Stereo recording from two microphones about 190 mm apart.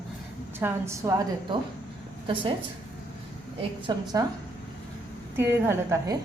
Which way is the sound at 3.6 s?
25° right (ahead or behind).